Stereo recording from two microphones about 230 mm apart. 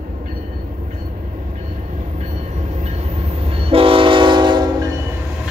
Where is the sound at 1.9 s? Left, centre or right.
Right.